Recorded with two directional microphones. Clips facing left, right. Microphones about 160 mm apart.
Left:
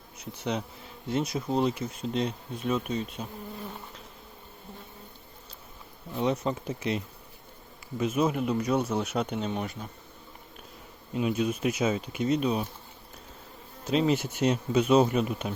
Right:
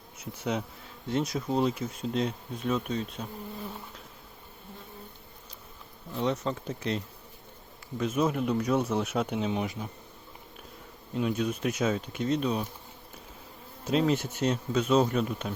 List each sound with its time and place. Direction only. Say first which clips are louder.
0.2 s bee: even; 5° right (ahead or behind)
1.1 s speech: even; centre (ahead or behind)
6.1 s speech: left 2 dB; 5° left (ahead or behind); by 9.9 s 10° right (ahead or behind)
11.1 s speech: left 1 dB; 5° left (ahead or behind)
13.8 s speech: left 1 dB; centre (ahead or behind)